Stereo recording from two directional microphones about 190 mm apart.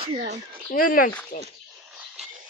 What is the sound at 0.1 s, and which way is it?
Speech, 40° right (ahead or behind).